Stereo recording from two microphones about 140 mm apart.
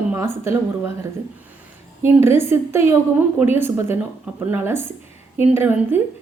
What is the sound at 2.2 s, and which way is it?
A woman's voice, 15° right (ahead or behind).